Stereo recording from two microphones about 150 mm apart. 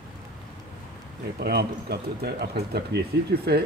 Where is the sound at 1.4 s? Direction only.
90° right.